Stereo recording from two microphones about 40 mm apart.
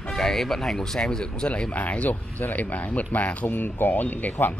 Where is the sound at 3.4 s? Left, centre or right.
Left.